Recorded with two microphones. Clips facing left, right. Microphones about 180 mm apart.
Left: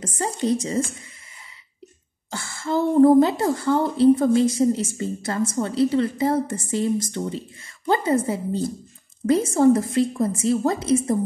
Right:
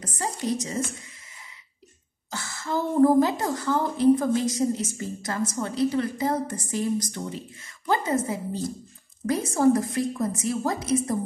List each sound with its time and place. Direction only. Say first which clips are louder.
0.0 s speech: left 5 dB; 25° left (ahead or behind)
2.3 s speech: left 5 dB; 25° left (ahead or behind)